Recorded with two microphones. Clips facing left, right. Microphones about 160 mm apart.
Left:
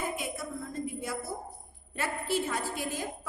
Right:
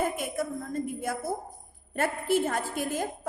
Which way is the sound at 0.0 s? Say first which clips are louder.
Right 6 dB; 50° right (ahead or behind).